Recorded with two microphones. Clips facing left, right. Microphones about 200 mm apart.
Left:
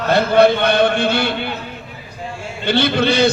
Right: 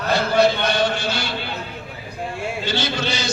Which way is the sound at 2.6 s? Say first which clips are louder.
Left 11 dB; 60° left (ahead or behind).